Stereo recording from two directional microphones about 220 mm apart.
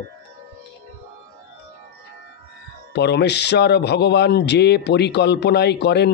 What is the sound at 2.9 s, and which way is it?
Speech, 50° left (ahead or behind).